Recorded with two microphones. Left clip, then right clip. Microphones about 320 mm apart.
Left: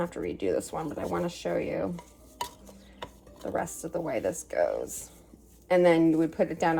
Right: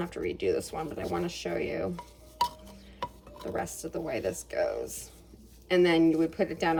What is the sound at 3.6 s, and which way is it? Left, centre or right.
Speech, centre.